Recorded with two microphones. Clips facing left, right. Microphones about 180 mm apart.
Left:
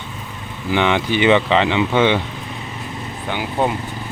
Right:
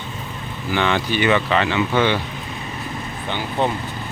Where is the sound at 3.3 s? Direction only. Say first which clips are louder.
Left 2 dB; 10° left (ahead or behind).